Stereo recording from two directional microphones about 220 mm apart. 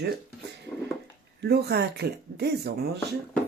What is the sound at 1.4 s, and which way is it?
Speech, 45° right (ahead or behind).